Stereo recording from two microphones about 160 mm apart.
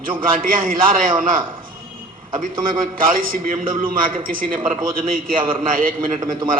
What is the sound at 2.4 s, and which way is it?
A man's voice, 60° right (ahead or behind).